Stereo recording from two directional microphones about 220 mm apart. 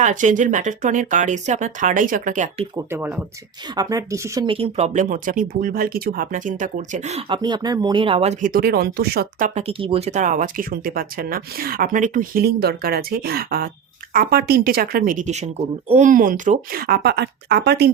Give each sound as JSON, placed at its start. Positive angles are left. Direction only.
{"t": 0.0, "sound": "speech", "side_deg": -35}
{"t": 2.7, "sound": "speech", "side_deg": -10}
{"t": 9.6, "sound": "speech", "side_deg": -25}